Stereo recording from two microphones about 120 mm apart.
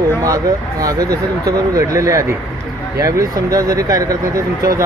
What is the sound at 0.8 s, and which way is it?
Speech, 30° right (ahead or behind).